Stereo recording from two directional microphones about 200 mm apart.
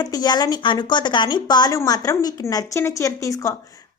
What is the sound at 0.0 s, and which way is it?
A woman's voice, 20° left (ahead or behind).